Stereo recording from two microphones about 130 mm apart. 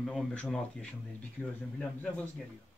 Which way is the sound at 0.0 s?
5° left (ahead or behind).